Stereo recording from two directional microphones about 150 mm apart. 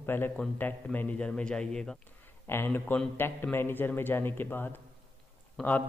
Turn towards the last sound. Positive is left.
turn(degrees=10)  # may be behind; listen again after turning